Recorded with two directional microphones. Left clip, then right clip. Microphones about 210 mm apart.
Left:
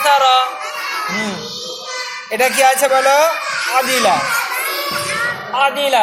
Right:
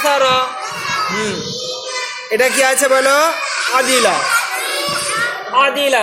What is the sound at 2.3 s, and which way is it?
A man's voice, 25° right (ahead or behind).